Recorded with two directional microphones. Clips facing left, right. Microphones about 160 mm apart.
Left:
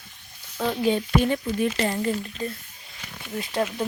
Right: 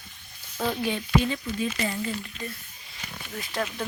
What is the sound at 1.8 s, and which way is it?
Speech, 40° left (ahead or behind).